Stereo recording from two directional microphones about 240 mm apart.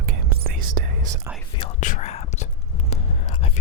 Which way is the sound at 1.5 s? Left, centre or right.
Left.